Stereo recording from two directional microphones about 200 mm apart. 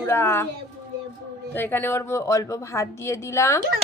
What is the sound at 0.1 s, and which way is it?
Speech, 10° left (ahead or behind).